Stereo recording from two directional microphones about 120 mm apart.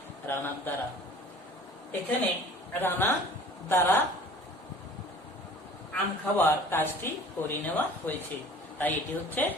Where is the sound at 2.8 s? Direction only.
20° left (ahead or behind).